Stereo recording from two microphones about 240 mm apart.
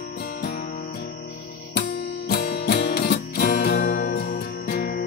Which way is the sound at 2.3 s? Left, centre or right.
Left.